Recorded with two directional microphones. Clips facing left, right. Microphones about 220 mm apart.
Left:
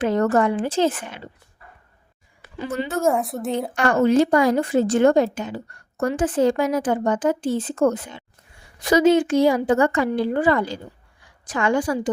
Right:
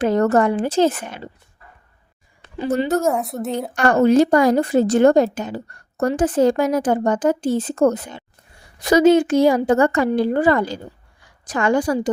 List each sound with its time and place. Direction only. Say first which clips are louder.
0.0 s a woman's voice: right 3 dB; 40° right (ahead or behind)
2.6 s a woman's voice: right 6 dB; 40° right (ahead or behind)
3.0 s a woman's voice: even; centre (ahead or behind)
3.8 s a woman's voice: right 3 dB; 40° right (ahead or behind)